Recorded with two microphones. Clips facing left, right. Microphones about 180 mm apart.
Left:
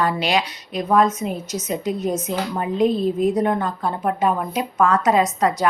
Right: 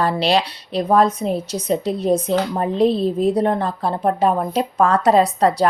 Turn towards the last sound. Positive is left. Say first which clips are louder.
# right 3 dB
turn(degrees=-35)  # may be behind; listen again after turning